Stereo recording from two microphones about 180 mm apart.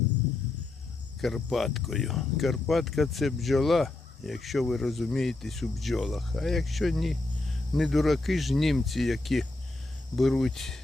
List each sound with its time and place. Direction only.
1.2 s speech: centre (ahead or behind)